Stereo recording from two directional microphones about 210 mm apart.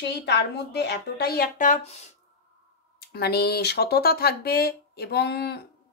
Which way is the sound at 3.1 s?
50° left (ahead or behind).